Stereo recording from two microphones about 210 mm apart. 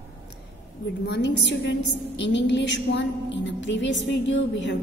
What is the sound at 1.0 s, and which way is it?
A woman's voice, 55° left (ahead or behind).